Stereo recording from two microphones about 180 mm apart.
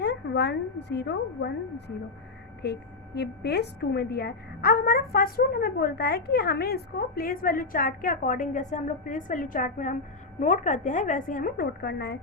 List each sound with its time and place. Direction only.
0.0 s a woman's voice: 70° left (ahead or behind)
3.2 s a woman's voice: 65° left (ahead or behind)